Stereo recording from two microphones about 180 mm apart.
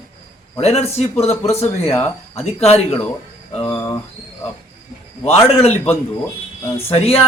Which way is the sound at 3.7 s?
20° left (ahead or behind).